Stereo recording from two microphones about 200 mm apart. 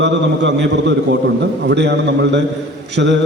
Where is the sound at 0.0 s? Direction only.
60° right (ahead or behind).